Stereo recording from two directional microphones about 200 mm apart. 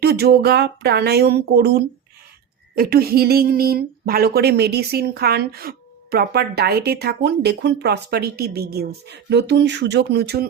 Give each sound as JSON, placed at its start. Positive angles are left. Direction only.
{"t": 0.0, "sound": "speech", "side_deg": -50}